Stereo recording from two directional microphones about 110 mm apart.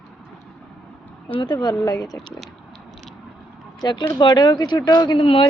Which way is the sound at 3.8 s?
40° left (ahead or behind).